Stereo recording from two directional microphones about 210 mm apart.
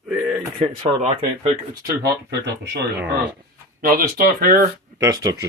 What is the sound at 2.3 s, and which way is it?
Speech, 55° right (ahead or behind).